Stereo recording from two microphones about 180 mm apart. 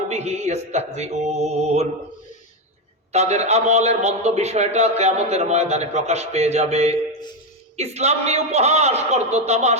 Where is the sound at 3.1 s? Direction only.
35° right (ahead or behind).